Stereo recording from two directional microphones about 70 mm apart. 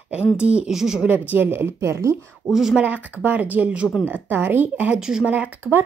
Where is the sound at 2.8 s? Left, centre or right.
Right.